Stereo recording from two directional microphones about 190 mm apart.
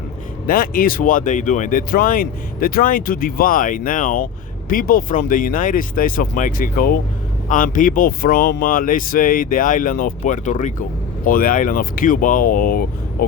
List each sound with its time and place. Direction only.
0.4 s speech: 50° left (ahead or behind)